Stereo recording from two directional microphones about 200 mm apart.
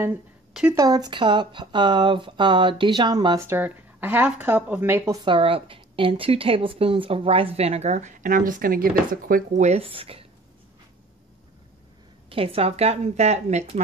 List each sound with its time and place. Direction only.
0.0 s speech: 5° right (ahead or behind)
0.7 s speech: 20° right (ahead or behind)
12.3 s a woman's voice: 30° right (ahead or behind)